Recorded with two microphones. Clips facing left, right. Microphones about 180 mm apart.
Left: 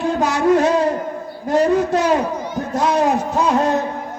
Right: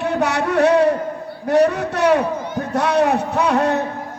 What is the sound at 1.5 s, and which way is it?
Music, 65° right (ahead or behind).